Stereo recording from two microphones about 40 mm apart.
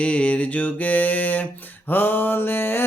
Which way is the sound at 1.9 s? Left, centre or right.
Left.